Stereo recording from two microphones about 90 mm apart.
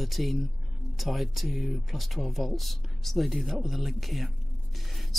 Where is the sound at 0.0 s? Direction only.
Centre (ahead or behind).